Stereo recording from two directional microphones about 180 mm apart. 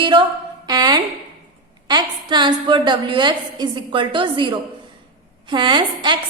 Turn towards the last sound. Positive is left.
turn(degrees=-25)  # may be behind; listen again after turning